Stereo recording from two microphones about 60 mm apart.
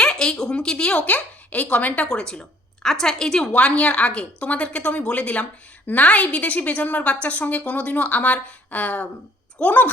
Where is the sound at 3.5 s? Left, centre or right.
Left.